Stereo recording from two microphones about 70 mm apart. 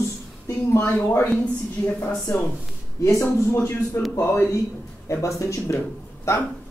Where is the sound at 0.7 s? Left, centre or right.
Left.